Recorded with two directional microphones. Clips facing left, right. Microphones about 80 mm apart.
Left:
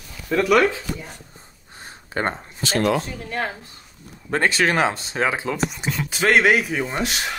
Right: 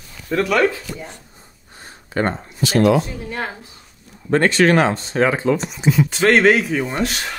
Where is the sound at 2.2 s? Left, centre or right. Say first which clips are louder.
Right 4 dB; left.